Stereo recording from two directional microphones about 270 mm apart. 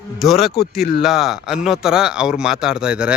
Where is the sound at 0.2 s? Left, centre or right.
Centre.